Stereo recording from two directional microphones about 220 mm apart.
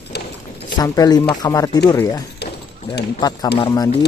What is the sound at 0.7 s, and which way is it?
Speech, 15° left (ahead or behind).